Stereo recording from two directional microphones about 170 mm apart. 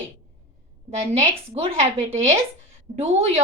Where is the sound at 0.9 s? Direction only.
35° right (ahead or behind).